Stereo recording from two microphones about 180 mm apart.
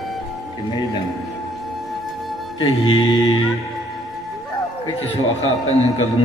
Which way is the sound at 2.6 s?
25° left (ahead or behind).